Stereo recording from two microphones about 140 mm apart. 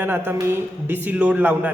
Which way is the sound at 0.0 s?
15° right (ahead or behind).